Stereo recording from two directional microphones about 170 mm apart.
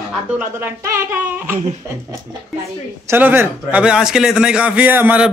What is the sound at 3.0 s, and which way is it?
A man's voice, 10° right (ahead or behind).